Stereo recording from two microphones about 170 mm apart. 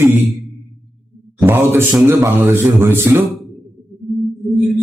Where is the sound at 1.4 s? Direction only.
15° right (ahead or behind).